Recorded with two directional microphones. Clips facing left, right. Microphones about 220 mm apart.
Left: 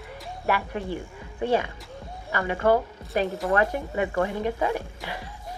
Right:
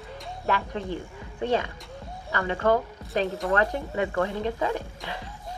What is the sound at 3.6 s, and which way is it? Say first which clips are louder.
Speech: left 1 dB; 15° left (ahead or behind).